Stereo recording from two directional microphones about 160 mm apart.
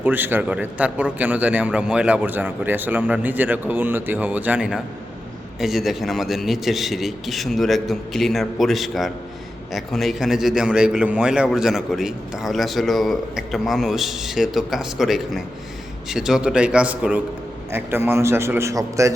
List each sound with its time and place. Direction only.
0.0 s a man's voice: 10° right (ahead or behind)